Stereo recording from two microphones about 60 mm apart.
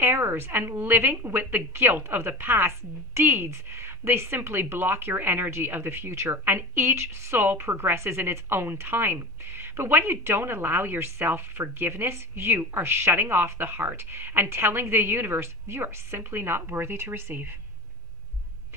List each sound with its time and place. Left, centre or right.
0.0 s a woman's voice: right
1.7 s a woman's voice: right